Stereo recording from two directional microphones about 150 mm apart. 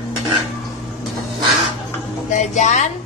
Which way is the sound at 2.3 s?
55° left (ahead or behind).